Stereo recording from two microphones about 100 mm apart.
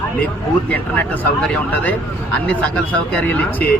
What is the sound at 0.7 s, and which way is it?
Speech, 15° left (ahead or behind).